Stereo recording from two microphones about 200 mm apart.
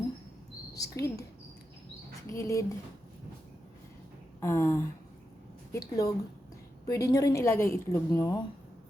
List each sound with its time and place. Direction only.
0.8 s a woman's voice: 15° left (ahead or behind)
2.3 s a woman's voice: 15° left (ahead or behind)
4.4 s a sound: 15° left (ahead or behind)
5.7 s a woman's voice: 15° left (ahead or behind)